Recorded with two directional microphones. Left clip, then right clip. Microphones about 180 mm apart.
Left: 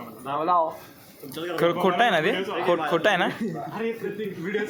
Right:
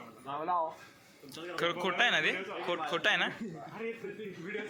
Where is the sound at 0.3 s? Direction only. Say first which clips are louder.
Left 11 dB; 20° right (ahead or behind).